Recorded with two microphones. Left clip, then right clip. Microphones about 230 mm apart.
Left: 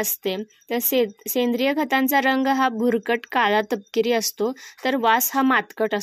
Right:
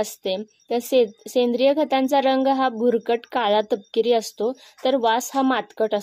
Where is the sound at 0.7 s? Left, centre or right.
Left.